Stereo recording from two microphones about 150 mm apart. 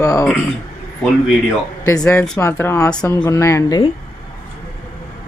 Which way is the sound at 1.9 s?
20° left (ahead or behind).